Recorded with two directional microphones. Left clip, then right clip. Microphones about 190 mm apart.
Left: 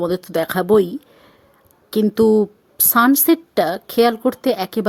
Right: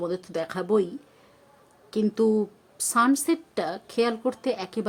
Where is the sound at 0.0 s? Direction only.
45° left (ahead or behind).